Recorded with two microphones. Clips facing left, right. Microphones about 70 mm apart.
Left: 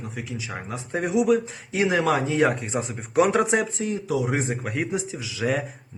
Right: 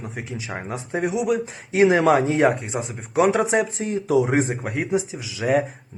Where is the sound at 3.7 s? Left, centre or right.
Right.